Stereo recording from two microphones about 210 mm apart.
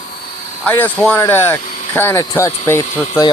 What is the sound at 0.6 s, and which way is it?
Speech, 10° left (ahead or behind).